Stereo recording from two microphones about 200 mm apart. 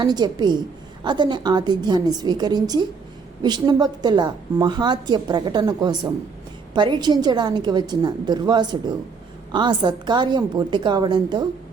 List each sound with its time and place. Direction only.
0.0 s a woman's voice: 20° right (ahead or behind)